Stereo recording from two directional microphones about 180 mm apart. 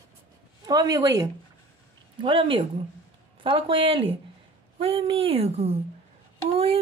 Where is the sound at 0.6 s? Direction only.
20° right (ahead or behind).